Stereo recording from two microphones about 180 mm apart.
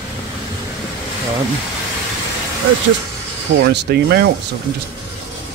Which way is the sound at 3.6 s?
70° right (ahead or behind).